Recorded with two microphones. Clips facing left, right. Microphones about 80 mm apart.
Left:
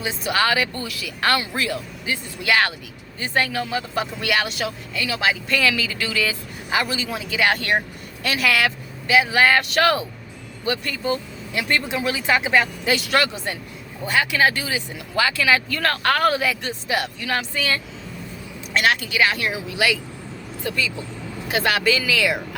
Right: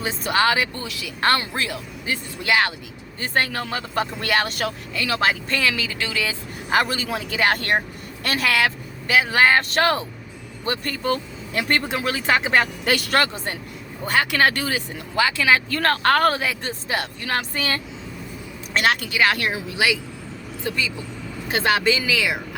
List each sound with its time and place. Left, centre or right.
0.0 s speech: right
3.2 s speech: right
4.0 s speech: right
5.5 s speech: right
6.7 s speech: right
7.3 s speech: right
8.2 s vehicle: right
9.2 s speech: right
13.1 s speech: right
15.1 s speech: right
19.7 s speech: right
21.4 s speech: right